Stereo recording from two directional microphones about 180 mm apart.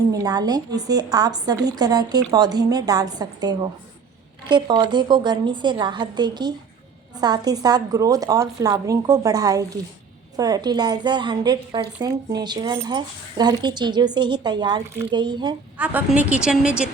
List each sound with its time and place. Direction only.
0.1 s a woman's voice: 20° right (ahead or behind)
15.8 s a woman's voice: 10° right (ahead or behind)